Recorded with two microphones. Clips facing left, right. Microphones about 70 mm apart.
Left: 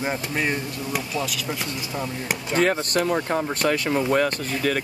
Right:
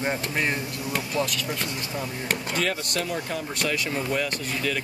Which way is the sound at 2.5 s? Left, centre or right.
Left.